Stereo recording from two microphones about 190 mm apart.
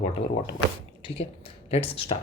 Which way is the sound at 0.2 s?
75° left (ahead or behind).